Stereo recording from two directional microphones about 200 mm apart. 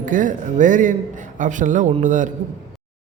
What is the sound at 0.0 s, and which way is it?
A man's voice, 40° right (ahead or behind).